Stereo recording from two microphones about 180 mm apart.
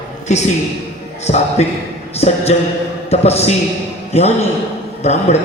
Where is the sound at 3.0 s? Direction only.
35° left (ahead or behind).